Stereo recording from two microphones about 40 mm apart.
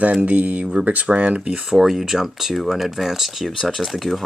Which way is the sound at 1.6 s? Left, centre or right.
Centre.